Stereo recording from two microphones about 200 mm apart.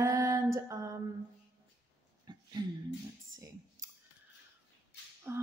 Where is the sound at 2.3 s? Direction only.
20° right (ahead or behind).